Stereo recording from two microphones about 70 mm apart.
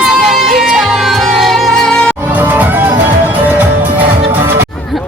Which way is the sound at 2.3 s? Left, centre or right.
Right.